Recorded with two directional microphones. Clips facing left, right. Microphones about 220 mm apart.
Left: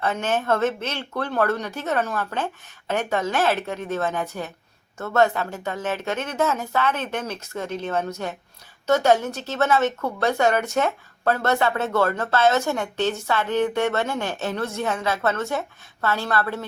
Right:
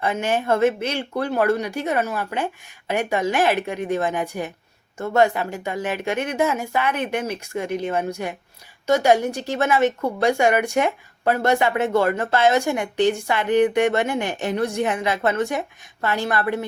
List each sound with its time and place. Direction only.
0.0 s a woman's voice: 10° right (ahead or behind)